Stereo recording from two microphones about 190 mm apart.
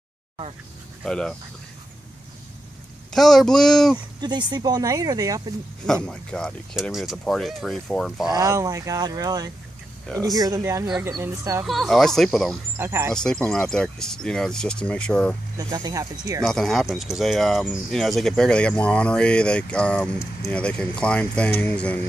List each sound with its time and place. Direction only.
1.0 s speech: 5° left (ahead or behind)
3.1 s speech: centre (ahead or behind)
4.2 s speech: 20° right (ahead or behind)
6.0 s speech: 5° left (ahead or behind)
8.3 s speech: 20° right (ahead or behind)
11.6 s speech: centre (ahead or behind)
12.7 s speech: 15° right (ahead or behind)
13.1 s speech: 5° left (ahead or behind)
15.5 s speech: 20° right (ahead or behind)
16.4 s speech: centre (ahead or behind)